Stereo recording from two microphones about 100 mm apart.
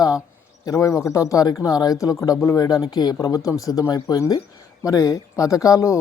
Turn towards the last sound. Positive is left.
turn(degrees=35)  # may be behind; listen again after turning